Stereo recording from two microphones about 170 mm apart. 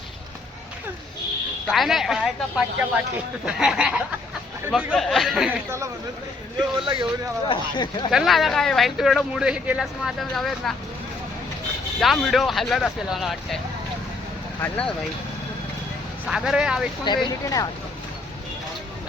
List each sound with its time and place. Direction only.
1.6 s speech: centre (ahead or behind)
6.8 s a man's voice: 30° right (ahead or behind)
7.4 s speech: 30° left (ahead or behind)
8.1 s speech: centre (ahead or behind)
11.9 s speech: centre (ahead or behind)
14.6 s speech: 5° left (ahead or behind)
16.2 s speech: 5° right (ahead or behind)
17.4 s speech: 20° left (ahead or behind)